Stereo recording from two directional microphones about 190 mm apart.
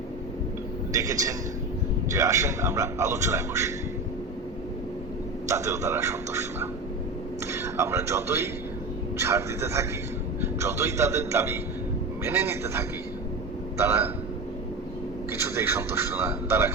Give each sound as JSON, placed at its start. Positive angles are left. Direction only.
{"t": 0.9, "sound": "a man's voice", "side_deg": -15}
{"t": 5.5, "sound": "a man's voice", "side_deg": -15}
{"t": 15.3, "sound": "a man's voice", "side_deg": -15}